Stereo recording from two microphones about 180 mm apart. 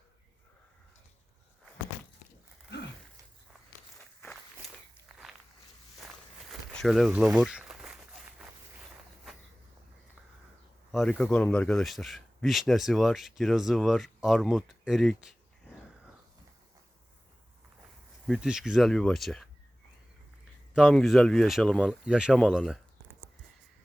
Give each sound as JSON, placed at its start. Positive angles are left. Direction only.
{"t": 5.2, "sound": "walk", "side_deg": 0}
{"t": 6.7, "sound": "a sound", "side_deg": 0}
{"t": 10.9, "sound": "speech", "side_deg": 0}
{"t": 18.3, "sound": "speech", "side_deg": -5}
{"t": 20.7, "sound": "speech", "side_deg": 0}